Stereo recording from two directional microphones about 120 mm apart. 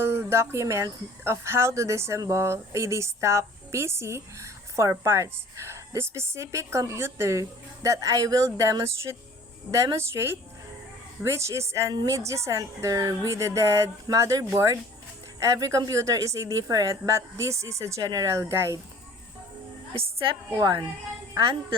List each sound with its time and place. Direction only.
0.0 s speech: 20° right (ahead or behind)
19.9 s a woman's voice: 50° right (ahead or behind)
20.6 s a woman's voice: 35° right (ahead or behind)